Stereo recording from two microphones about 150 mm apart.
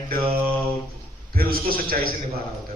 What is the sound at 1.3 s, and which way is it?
Speech, 80° right.